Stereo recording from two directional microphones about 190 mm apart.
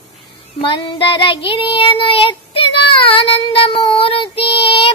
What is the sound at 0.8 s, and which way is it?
Child singing, 25° left (ahead or behind).